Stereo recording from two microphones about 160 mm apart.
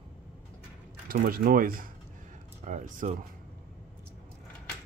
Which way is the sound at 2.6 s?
50° right (ahead or behind).